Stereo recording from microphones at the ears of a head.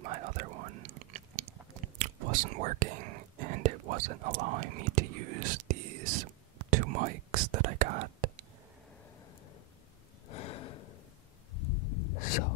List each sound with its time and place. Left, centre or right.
0.0 s whispering: right
10.2 s gasp: left
11.5 s a sound: left